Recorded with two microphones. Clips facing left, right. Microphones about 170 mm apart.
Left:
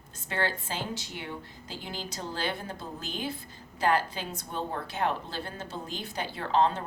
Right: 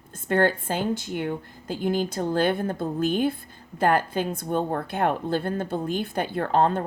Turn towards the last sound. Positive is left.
turn(degrees=-50)  # may be behind; listen again after turning